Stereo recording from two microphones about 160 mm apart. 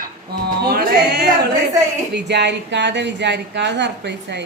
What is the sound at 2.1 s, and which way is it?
A woman's voice, 90° right.